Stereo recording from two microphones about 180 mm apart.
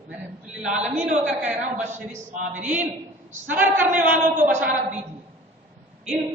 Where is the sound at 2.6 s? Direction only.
10° right (ahead or behind).